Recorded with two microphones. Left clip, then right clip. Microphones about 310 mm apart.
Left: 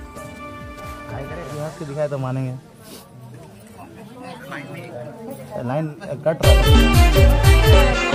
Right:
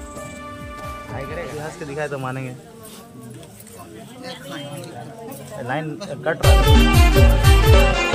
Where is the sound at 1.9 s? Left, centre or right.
Left.